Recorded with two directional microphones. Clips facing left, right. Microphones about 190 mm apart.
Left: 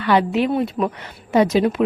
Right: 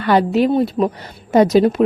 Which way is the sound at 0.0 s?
40° right (ahead or behind).